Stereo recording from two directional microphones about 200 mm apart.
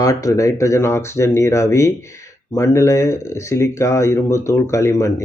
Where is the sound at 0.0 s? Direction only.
15° left (ahead or behind).